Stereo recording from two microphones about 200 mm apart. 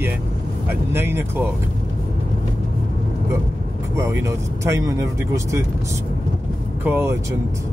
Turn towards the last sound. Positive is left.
turn(degrees=-10)  # may be behind; listen again after turning